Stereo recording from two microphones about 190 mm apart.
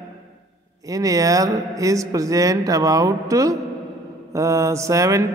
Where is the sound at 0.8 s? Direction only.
20° right (ahead or behind).